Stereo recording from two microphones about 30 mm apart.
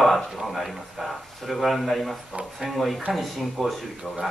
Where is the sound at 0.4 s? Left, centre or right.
Centre.